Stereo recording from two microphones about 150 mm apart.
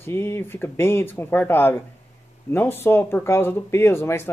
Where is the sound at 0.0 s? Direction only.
15° left (ahead or behind).